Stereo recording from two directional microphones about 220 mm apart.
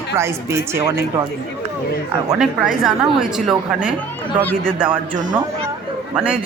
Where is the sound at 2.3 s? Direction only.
5° right (ahead or behind).